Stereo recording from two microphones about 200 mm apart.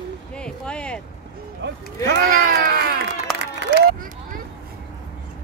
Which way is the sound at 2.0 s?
50° right (ahead or behind).